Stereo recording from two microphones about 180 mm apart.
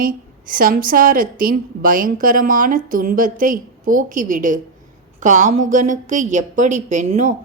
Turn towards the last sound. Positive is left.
turn(degrees=-40)  # may be behind; listen again after turning